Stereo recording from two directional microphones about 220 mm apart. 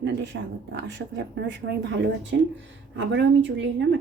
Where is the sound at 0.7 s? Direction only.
55° right (ahead or behind).